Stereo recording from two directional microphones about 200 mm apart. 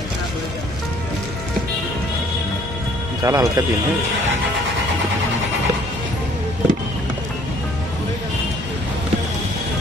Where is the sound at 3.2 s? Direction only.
20° right (ahead or behind).